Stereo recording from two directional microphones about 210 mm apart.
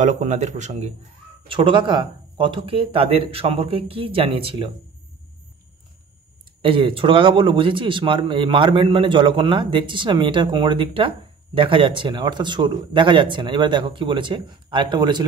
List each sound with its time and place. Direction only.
0.0 s a man's voice: 35° right (ahead or behind)
6.6 s a man's voice: 25° right (ahead or behind)